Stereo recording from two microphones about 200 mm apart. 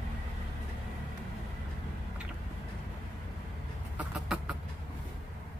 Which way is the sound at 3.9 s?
5° right (ahead or behind).